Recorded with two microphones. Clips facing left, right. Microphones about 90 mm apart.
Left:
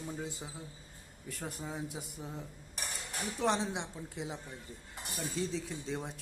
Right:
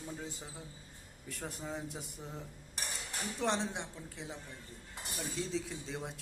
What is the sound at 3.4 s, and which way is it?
Speech, centre (ahead or behind).